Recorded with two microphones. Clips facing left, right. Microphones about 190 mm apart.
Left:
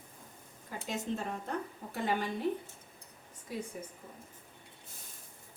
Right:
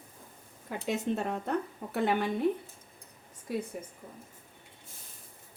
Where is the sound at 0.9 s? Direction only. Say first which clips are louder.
Right 5 dB; 65° right (ahead or behind).